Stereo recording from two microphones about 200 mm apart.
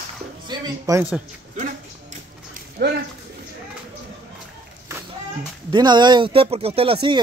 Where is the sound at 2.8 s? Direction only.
55° right (ahead or behind).